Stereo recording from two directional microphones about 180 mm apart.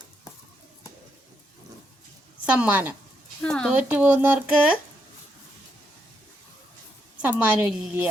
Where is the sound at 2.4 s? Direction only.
5° right (ahead or behind).